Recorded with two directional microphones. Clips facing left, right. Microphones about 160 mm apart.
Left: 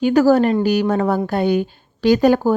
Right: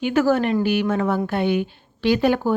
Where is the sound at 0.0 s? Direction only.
40° left (ahead or behind).